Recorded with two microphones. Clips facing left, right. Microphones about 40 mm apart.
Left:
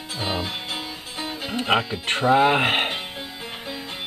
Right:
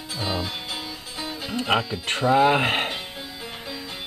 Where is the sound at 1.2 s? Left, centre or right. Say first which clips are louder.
Left 1 dB; left.